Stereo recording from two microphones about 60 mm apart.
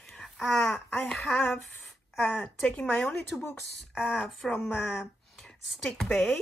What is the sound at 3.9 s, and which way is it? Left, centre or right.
A woman's voice, centre.